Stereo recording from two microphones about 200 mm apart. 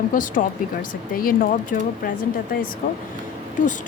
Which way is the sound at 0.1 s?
40° left (ahead or behind).